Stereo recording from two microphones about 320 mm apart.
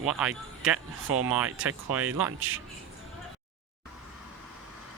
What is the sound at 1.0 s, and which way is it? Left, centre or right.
Speech, right.